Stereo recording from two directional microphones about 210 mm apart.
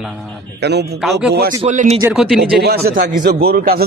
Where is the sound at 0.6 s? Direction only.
50° right (ahead or behind).